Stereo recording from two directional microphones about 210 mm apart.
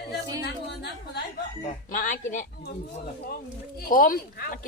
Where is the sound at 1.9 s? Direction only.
40° left (ahead or behind).